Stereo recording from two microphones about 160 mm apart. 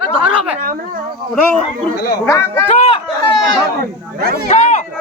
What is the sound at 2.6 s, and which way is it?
Speech, 40° left (ahead or behind).